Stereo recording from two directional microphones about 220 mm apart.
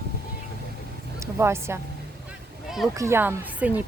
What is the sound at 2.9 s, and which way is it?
Speech, 10° right (ahead or behind).